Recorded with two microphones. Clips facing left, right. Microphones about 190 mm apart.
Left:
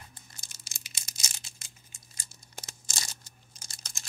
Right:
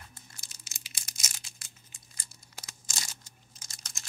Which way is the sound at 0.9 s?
25° left (ahead or behind).